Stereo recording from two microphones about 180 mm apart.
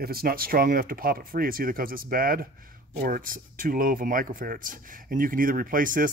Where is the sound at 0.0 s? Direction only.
55° right (ahead or behind).